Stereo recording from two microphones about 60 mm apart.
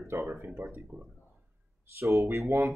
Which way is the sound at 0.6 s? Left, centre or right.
Right.